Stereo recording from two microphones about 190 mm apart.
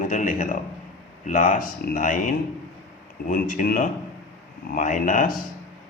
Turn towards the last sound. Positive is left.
turn(degrees=45)  # may be behind; listen again after turning